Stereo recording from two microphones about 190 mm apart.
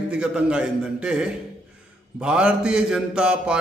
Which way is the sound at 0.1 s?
5° right (ahead or behind).